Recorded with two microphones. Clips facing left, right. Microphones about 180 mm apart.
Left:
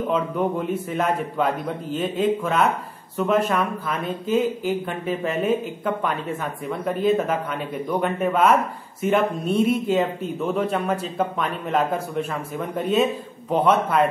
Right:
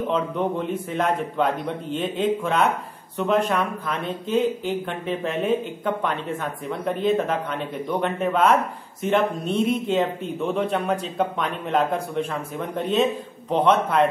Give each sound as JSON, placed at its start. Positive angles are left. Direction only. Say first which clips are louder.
{"t": 0.1, "sound": "a man's voice", "louder": "left 2 dB", "side_deg": 5}